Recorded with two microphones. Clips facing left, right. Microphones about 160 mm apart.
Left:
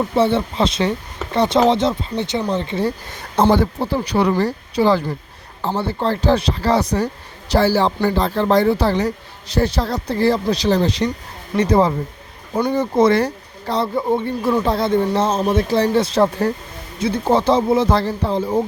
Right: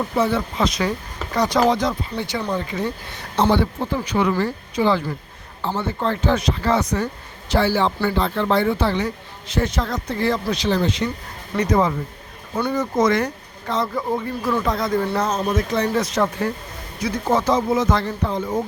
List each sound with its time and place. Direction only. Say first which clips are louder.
0.2 s speech: left 3 dB; 25° left (ahead or behind)
3.4 s speech: left 3 dB; 40° left (ahead or behind)